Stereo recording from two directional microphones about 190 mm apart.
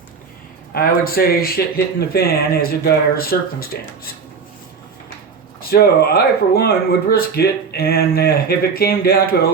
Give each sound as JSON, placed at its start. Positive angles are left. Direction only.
{"t": 0.7, "sound": "speech", "side_deg": 50}
{"t": 5.5, "sound": "speech", "side_deg": 50}